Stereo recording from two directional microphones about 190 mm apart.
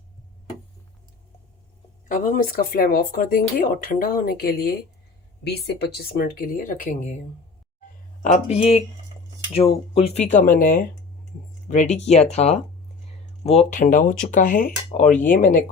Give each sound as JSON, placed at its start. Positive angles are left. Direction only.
{"t": 2.0, "sound": "speech", "side_deg": 45}
{"t": 8.2, "sound": "speech", "side_deg": 35}
{"t": 9.9, "sound": "speech", "side_deg": 35}